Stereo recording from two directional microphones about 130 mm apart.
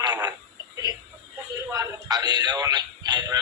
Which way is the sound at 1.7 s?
30° right (ahead or behind).